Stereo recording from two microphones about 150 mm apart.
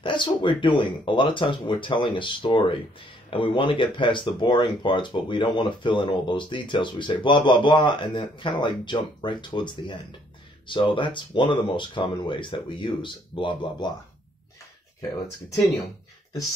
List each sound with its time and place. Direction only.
0.0 s speech: 30° left (ahead or behind)